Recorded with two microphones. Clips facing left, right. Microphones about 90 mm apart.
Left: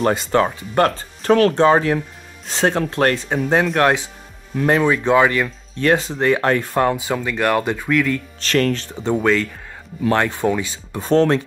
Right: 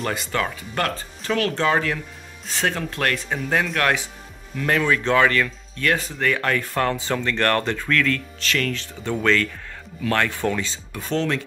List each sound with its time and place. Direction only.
0.0 s speech: 30° left (ahead or behind)
1.5 s speech: 25° left (ahead or behind)
8.4 s speech: 40° left (ahead or behind)
8.9 s speech: 25° left (ahead or behind)
10.9 s speech: 40° left (ahead or behind)